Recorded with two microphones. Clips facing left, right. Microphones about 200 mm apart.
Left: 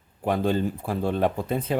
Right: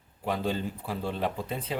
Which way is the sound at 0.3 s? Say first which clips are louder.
Left 6 dB; 50° left (ahead or behind).